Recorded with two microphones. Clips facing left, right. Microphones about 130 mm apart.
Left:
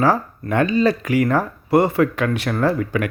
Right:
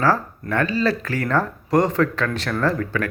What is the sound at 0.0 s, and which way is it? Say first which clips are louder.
Speech: left 2 dB; 15° left (ahead or behind).